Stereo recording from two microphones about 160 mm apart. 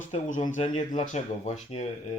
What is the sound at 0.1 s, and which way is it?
Speech, 45° left (ahead or behind).